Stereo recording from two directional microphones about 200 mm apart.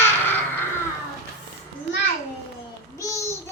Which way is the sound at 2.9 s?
15° left (ahead or behind).